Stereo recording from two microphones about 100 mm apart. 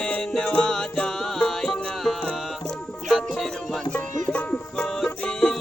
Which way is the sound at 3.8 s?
15° left (ahead or behind).